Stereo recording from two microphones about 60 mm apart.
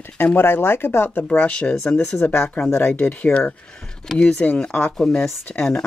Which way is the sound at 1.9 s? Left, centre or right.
Left.